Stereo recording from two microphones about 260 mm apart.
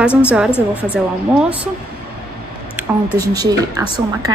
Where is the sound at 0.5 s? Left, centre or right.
Centre.